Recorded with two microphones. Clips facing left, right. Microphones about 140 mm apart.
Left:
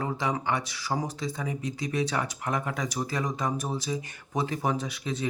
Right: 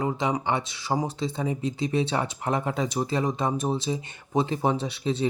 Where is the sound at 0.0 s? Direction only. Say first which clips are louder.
Right 3 dB; 20° right (ahead or behind).